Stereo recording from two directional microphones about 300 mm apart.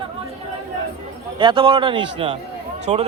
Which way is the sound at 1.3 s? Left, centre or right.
Centre.